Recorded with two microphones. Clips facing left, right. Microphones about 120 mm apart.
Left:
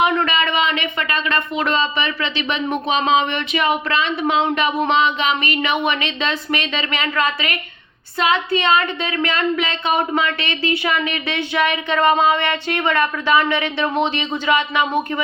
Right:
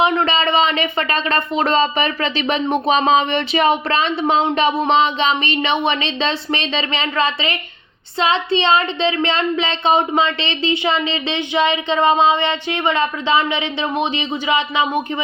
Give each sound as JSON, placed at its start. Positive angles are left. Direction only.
{"t": 0.0, "sound": "speech", "side_deg": -30}